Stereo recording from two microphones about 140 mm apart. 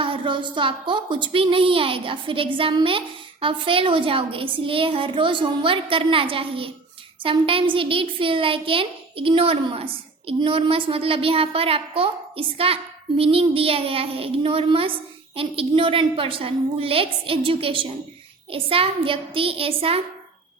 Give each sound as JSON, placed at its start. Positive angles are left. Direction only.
{"t": 0.0, "sound": "a woman's voice", "side_deg": -35}